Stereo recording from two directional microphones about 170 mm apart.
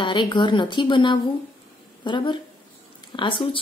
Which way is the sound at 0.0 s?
25° left (ahead or behind).